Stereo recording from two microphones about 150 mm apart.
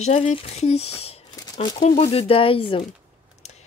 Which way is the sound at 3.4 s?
45° left (ahead or behind).